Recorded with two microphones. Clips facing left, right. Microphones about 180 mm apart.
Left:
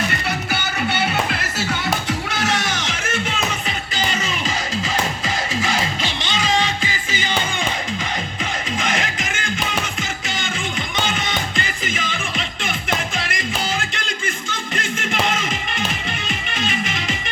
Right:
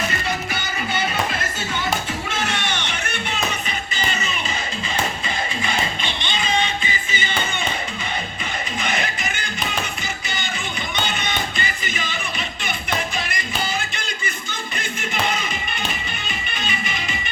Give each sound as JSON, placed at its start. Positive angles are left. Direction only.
{"t": 0.5, "sound": "music", "side_deg": 70}
{"t": 2.3, "sound": "music", "side_deg": 90}
{"t": 5.6, "sound": "music", "side_deg": 90}
{"t": 8.8, "sound": "music", "side_deg": 90}
{"t": 16.6, "sound": "music", "side_deg": 90}